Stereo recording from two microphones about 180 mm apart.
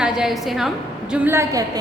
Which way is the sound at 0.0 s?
5° right (ahead or behind).